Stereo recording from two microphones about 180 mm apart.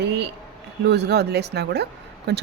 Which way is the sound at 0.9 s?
65° right (ahead or behind).